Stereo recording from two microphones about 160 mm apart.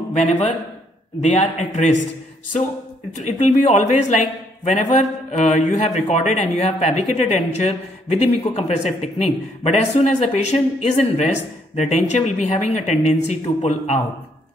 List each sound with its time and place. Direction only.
0.1 s speech: 50° left (ahead or behind)
3.2 s speech: 50° left (ahead or behind)